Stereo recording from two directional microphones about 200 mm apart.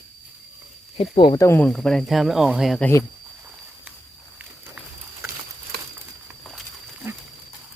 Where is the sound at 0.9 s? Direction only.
25° left (ahead or behind).